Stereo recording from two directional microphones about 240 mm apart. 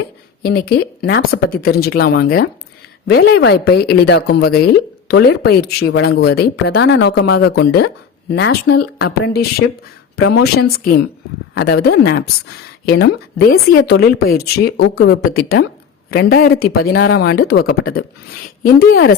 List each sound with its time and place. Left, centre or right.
0.4 s a woman's voice: left
6.7 s a woman's voice: left
18.6 s a woman's voice: left